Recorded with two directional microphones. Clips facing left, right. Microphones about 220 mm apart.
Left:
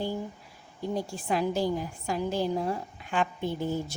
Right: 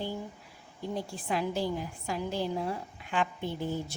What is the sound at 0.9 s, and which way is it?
A woman's voice, 40° left (ahead or behind).